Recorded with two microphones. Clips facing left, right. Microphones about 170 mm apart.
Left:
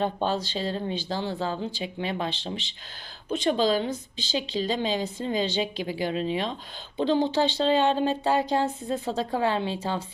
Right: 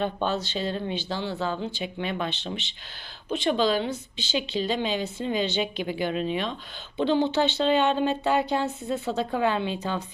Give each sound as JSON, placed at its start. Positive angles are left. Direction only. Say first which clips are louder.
{"t": 0.0, "sound": "speech", "louder": "even", "side_deg": 35}